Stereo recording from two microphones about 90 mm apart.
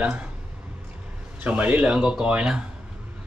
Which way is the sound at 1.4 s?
15° right (ahead or behind).